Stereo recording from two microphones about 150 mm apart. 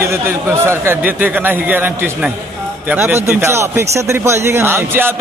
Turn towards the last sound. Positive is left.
turn(degrees=-15)  # may be behind; listen again after turning